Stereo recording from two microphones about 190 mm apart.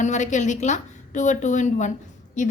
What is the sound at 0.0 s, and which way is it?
A woman's voice, 40° left (ahead or behind).